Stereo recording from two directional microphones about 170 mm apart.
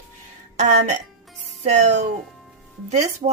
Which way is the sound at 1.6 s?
45° right (ahead or behind).